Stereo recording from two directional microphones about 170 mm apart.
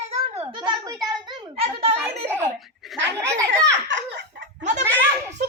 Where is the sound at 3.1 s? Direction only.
20° right (ahead or behind).